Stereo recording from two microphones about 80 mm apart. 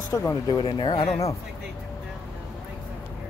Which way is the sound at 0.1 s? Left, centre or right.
Left.